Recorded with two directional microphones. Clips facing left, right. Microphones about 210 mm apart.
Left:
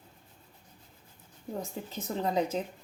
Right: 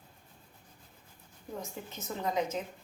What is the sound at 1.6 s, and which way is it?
Speech, 35° left (ahead or behind).